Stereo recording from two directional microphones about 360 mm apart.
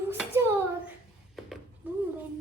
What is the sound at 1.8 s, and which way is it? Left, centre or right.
Speech, centre.